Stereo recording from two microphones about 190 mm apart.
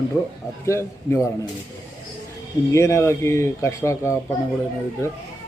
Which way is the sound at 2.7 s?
15° left (ahead or behind).